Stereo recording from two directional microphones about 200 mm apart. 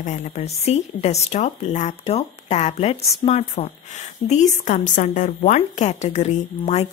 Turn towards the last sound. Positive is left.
turn(degrees=35)  # may be behind; listen again after turning